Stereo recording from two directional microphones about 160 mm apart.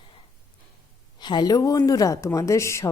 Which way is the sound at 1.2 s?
25° left (ahead or behind).